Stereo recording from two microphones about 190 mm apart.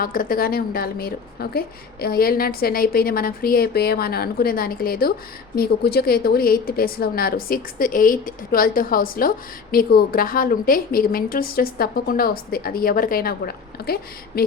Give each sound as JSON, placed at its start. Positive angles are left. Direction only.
{"t": 0.0, "sound": "a woman's voice", "side_deg": 50}